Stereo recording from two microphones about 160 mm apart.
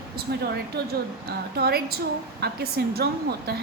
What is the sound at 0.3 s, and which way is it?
Speech, 80° right.